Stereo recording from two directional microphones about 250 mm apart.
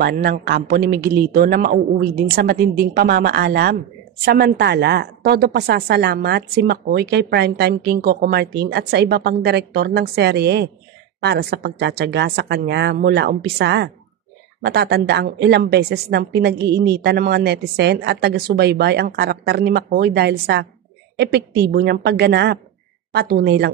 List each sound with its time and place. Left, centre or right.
0.0 s a woman's voice: right